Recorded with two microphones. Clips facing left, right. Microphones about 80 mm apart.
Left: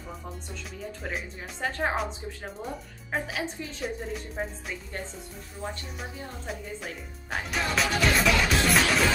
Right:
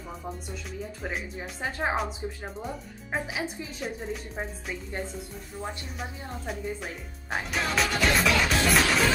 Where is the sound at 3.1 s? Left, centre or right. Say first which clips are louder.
Even; centre.